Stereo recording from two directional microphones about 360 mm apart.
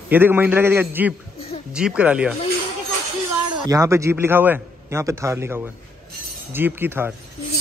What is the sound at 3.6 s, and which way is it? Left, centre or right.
A man's voice, centre.